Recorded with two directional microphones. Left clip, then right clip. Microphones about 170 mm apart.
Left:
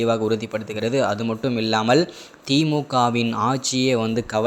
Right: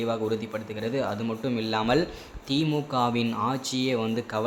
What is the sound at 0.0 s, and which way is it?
Speech, 35° left (ahead or behind).